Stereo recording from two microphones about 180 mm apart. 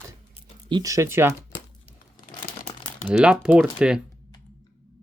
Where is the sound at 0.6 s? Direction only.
20° right (ahead or behind).